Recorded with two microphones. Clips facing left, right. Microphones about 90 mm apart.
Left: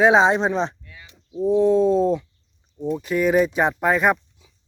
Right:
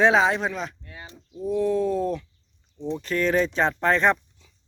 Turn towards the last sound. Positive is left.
turn(degrees=10)  # may be behind; listen again after turning